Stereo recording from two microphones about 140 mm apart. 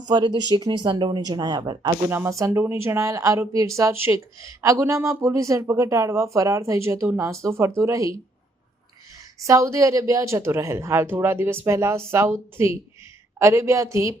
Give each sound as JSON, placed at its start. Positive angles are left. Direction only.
{"t": 0.1, "sound": "speech", "side_deg": -35}
{"t": 2.0, "sound": "speech", "side_deg": -20}
{"t": 9.4, "sound": "speech", "side_deg": -20}